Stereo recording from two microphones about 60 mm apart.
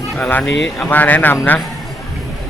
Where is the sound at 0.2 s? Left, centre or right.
Left.